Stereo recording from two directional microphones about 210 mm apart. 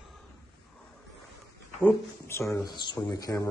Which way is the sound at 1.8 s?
10° left (ahead or behind).